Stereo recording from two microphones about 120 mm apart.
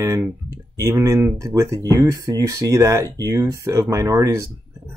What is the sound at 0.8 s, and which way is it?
Speech, 25° right (ahead or behind).